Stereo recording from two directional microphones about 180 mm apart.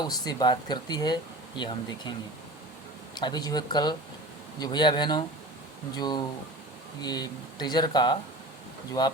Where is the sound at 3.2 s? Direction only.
25° left (ahead or behind).